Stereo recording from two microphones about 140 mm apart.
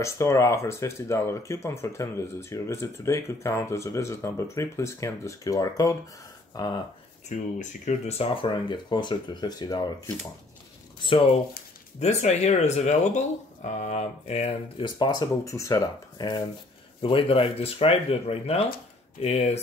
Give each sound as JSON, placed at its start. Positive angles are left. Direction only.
{"t": 0.0, "sound": "speech", "side_deg": 20}
{"t": 7.2, "sound": "mantra", "side_deg": 60}
{"t": 8.2, "sound": "speech", "side_deg": 35}
{"t": 11.0, "sound": "speech", "side_deg": 35}
{"t": 12.0, "sound": "speech", "side_deg": 50}
{"t": 13.7, "sound": "mantra", "side_deg": 55}
{"t": 14.8, "sound": "speech", "side_deg": 30}